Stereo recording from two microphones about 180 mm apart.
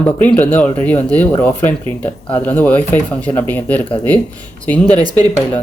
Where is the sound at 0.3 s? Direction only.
10° left (ahead or behind).